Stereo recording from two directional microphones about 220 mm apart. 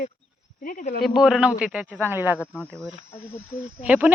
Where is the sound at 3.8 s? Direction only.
5° right (ahead or behind).